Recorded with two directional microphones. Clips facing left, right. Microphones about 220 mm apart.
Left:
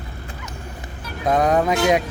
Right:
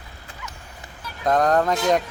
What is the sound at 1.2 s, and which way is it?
Speech, 5° left (ahead or behind).